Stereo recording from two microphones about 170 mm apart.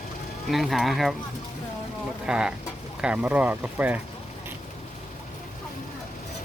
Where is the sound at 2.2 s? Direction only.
5° right (ahead or behind).